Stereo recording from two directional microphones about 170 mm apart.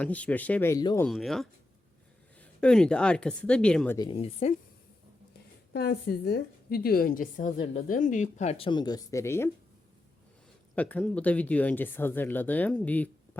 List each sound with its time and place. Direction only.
0.0 s speech: 10° left (ahead or behind)
1.0 s speech: centre (ahead or behind)
3.9 s speech: 25° left (ahead or behind)
4.2 s a woman's voice: 35° left (ahead or behind)
5.7 s a woman's voice: 75° left (ahead or behind); by 9.5 s 15° left (ahead or behind)
10.8 s speech: 10° left (ahead or behind)